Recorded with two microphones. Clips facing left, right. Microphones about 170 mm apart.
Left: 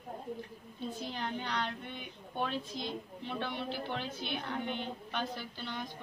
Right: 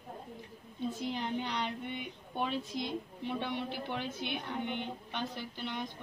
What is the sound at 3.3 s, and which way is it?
Speech, 20° right (ahead or behind).